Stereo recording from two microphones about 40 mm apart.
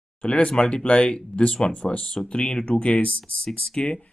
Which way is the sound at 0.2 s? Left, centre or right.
Left.